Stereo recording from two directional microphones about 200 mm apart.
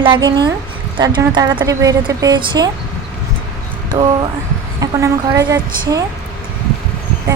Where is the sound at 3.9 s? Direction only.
25° right (ahead or behind).